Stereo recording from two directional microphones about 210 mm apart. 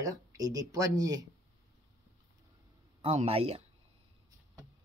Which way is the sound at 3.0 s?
30° right (ahead or behind).